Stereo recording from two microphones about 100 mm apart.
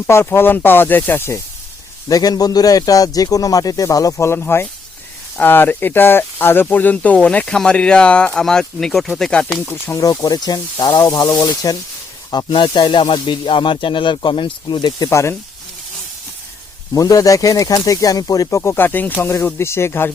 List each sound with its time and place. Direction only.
0.1 s speech: 25° left (ahead or behind)
2.0 s speech: 40° left (ahead or behind); by 9.7 s 10° left (ahead or behind)
9.8 s speech: 30° left (ahead or behind)
10.1 s speech: 40° left (ahead or behind)
15.1 s speech: 30° left (ahead or behind)
16.9 s speech: 35° left (ahead or behind)